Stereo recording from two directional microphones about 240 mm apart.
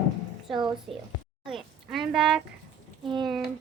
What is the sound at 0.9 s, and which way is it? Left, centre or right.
A woman's voice, centre.